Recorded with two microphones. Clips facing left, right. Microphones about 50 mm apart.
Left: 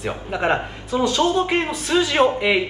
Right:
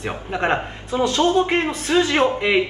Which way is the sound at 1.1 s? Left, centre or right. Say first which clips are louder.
Right 3 dB; right.